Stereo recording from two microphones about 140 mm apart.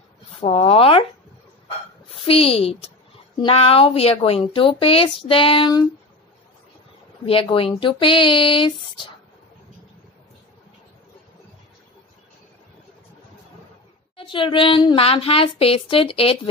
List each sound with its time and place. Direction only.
0.4 s a woman's voice: 45° left (ahead or behind)
2.0 s a woman's voice: 45° left (ahead or behind)
7.2 s a woman's voice: 40° left (ahead or behind)
14.1 s a woman's voice: 35° left (ahead or behind)